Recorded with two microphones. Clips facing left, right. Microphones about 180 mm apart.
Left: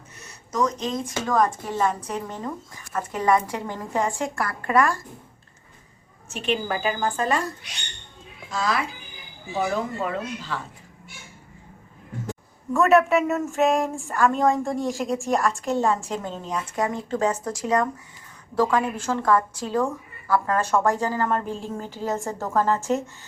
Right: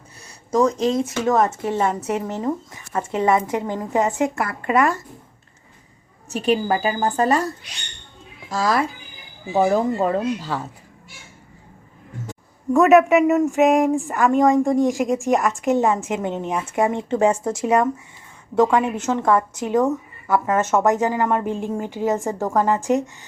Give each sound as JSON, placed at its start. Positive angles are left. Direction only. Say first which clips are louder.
{"t": 0.2, "sound": "a sound", "louder": "right 6 dB", "side_deg": -30}
{"t": 0.9, "sound": "a woman's voice", "louder": "right 4 dB", "side_deg": -25}
{"t": 3.1, "sound": "a woman's voice", "louder": "right 3 dB", "side_deg": -25}
{"t": 6.3, "sound": "a woman's voice", "louder": "right 6 dB", "side_deg": -35}
{"t": 8.4, "sound": "a woman's voice", "louder": "right 5 dB", "side_deg": -45}
{"t": 12.7, "sound": "a woman's voice", "louder": "right 5 dB", "side_deg": -15}
{"t": 21.4, "sound": "speech", "louder": "right 6 dB", "side_deg": -55}
{"t": 21.8, "sound": "a woman's voice", "louder": "right 6 dB", "side_deg": -15}